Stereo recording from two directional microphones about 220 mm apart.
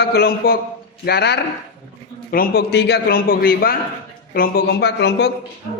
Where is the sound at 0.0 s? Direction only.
45° left (ahead or behind).